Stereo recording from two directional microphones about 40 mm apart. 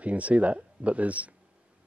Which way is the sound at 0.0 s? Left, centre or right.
Right.